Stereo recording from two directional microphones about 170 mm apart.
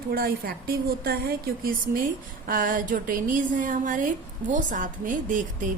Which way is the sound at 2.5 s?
55° right (ahead or behind).